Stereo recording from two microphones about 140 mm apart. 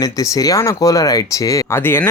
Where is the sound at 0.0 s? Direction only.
25° left (ahead or behind).